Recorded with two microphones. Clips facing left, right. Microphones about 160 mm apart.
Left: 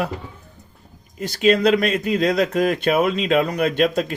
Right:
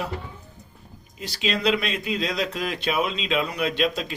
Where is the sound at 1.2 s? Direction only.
50° left (ahead or behind).